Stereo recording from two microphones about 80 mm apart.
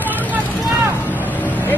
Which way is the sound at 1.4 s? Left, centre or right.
Left.